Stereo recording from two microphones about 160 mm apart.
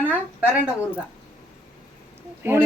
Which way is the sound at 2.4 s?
15° right (ahead or behind).